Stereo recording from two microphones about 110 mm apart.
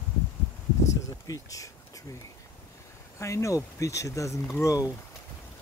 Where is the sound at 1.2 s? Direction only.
30° left (ahead or behind).